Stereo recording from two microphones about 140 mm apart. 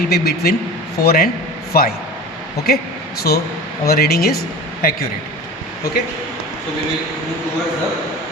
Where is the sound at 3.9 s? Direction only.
90° left.